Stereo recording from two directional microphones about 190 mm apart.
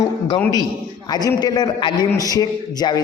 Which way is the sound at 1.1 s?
20° left (ahead or behind).